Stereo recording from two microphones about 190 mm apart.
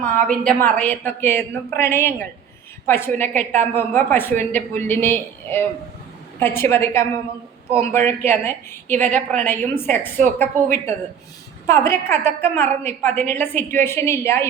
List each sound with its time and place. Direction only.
0.3 s a woman's voice: 5° left (ahead or behind)